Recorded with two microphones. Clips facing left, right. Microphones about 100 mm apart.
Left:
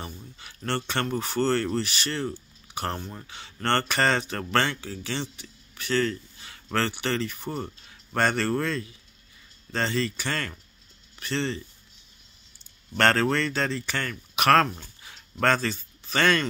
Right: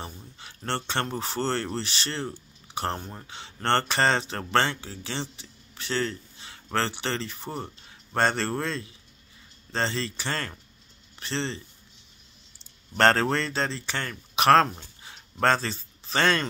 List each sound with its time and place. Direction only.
0.4 s speech: 25° right (ahead or behind)
12.9 s speech: 30° right (ahead or behind)